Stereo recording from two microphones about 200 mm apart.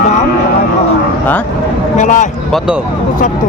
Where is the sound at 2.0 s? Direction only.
40° left (ahead or behind).